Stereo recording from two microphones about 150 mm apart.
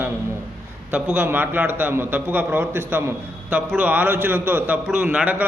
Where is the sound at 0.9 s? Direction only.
10° right (ahead or behind).